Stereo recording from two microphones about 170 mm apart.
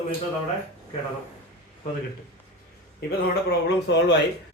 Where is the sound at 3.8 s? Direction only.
90° left.